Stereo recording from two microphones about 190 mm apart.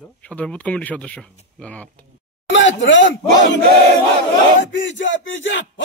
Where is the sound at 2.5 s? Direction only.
75° left (ahead or behind).